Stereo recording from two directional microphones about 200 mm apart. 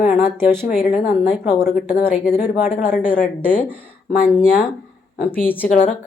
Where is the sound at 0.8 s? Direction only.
35° left (ahead or behind).